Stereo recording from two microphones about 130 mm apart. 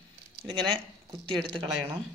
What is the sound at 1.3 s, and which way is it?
Speech, 40° right (ahead or behind).